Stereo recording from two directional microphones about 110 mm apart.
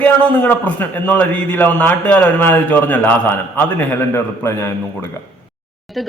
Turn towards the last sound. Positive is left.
turn(degrees=0)  # may be behind; listen again after turning